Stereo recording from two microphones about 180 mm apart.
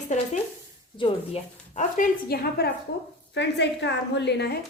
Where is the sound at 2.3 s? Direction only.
60° left (ahead or behind).